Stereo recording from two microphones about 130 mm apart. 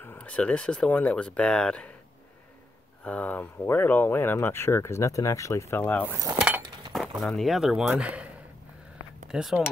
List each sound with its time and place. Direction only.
0.0 s speech: 10° left (ahead or behind)
3.0 s speech: 10° left (ahead or behind)
6.0 s cutlery: 15° right (ahead or behind)
7.2 s speech: centre (ahead or behind)
9.3 s speech: 5° right (ahead or behind)